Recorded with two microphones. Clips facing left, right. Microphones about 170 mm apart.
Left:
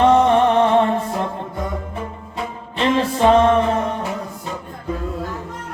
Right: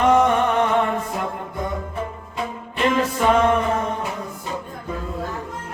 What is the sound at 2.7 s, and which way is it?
Music, 30° left (ahead or behind).